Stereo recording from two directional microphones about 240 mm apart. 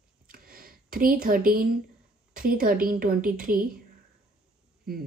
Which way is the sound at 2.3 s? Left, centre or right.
Right.